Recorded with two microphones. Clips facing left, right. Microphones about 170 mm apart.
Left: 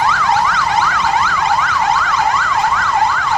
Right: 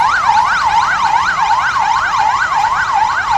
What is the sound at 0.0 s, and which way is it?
Emergency vehicle, 70° right (ahead or behind).